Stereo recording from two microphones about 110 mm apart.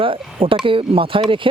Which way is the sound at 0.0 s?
55° right (ahead or behind).